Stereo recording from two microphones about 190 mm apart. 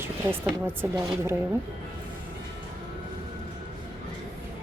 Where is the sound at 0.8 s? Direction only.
15° right (ahead or behind).